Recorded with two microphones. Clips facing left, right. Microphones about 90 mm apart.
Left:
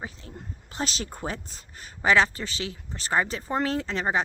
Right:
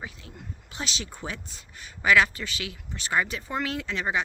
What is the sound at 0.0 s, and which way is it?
A woman's voice, 35° left (ahead or behind).